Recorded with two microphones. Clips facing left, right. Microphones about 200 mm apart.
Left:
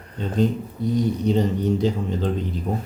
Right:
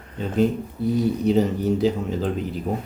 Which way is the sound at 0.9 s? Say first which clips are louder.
Right 1 dB; 5° right (ahead or behind).